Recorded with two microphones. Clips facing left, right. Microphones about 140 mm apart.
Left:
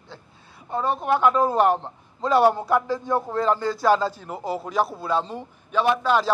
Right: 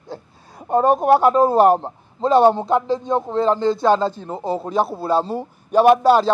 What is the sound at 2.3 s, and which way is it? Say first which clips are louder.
A man's voice: right 4 dB; 25° right (ahead or behind).